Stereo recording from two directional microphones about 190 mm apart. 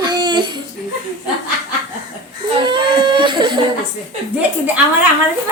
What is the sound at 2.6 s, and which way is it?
Baby cry, 25° right (ahead or behind).